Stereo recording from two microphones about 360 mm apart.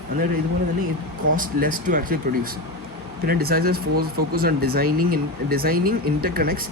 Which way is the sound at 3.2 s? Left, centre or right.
Right.